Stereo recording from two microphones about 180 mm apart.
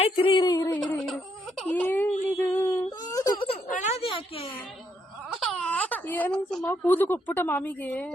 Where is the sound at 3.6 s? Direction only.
40° left (ahead or behind).